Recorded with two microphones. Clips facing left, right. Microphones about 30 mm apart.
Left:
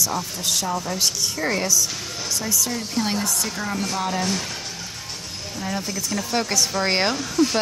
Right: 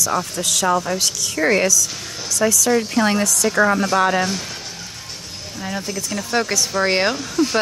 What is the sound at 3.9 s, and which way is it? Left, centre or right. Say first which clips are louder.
Speech: right 8 dB; right.